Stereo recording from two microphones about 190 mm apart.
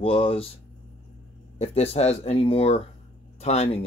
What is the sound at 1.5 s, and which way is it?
Speech, 35° left (ahead or behind).